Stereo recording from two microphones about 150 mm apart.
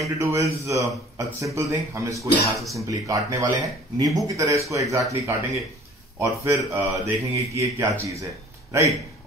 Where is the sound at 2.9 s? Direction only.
20° right (ahead or behind).